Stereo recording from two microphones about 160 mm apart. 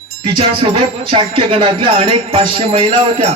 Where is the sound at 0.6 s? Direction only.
35° right (ahead or behind).